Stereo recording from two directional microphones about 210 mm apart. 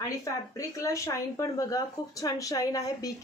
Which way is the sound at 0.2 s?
15° left (ahead or behind).